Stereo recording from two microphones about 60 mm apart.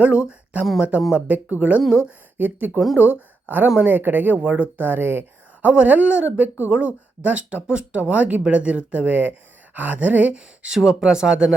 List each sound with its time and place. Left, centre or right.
0.0 s speech: centre; by 5.2 s right
5.6 s speech: right